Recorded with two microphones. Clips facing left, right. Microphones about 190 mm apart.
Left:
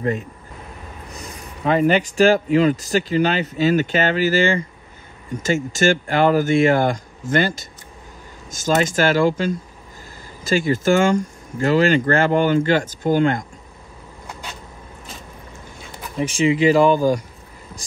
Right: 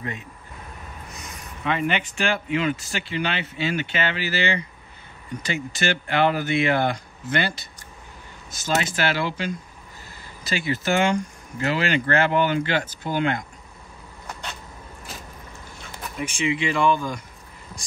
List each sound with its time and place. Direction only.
1.1 s speech: 35° left (ahead or behind)
16.2 s speech: 35° left (ahead or behind)